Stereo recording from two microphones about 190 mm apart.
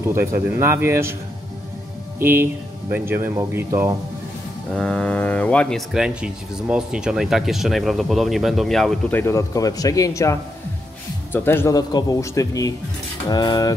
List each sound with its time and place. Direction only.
0.0 s speech: 15° right (ahead or behind)
2.1 s speech: 10° right (ahead or behind)
4.7 s speech: 5° left (ahead or behind)
9.2 s speech: 15° left (ahead or behind)
11.3 s speech: 10° left (ahead or behind)